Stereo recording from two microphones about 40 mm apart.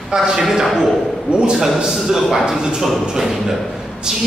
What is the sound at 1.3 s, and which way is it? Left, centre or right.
Speech, right.